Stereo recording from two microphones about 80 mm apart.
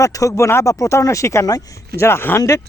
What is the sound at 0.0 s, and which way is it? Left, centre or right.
Speech, left.